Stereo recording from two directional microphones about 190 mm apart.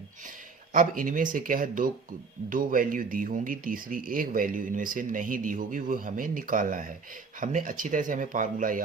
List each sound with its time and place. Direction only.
0.7 s speech: 45° right (ahead or behind)